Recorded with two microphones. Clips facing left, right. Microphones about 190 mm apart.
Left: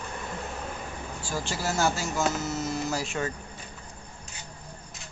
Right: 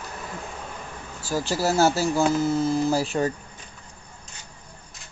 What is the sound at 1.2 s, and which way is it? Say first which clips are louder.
Speech: right 7 dB; 35° right (ahead or behind).